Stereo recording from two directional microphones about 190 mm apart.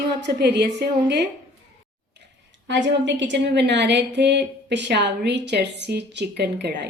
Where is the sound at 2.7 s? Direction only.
70° right (ahead or behind).